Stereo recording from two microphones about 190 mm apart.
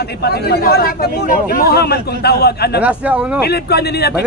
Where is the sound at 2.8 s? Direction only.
5° right (ahead or behind).